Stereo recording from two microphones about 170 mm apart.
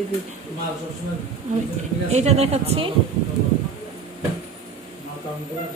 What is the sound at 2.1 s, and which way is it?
Speech, 40° right (ahead or behind).